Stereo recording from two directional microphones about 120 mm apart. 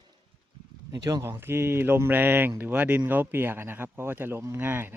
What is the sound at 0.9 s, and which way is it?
Speech, 30° right (ahead or behind).